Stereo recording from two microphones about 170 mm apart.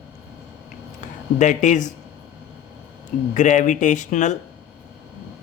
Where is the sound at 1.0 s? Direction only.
45° left (ahead or behind).